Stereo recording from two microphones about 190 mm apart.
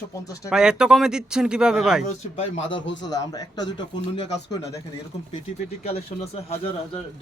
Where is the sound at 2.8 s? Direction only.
75° left (ahead or behind).